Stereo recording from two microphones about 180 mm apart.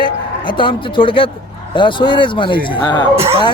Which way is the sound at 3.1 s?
35° right (ahead or behind).